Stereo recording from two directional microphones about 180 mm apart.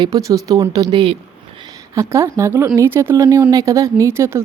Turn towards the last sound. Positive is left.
turn(degrees=-15)  # may be behind; listen again after turning